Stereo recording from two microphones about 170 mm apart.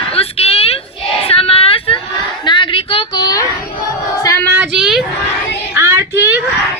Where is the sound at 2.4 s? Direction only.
30° left (ahead or behind).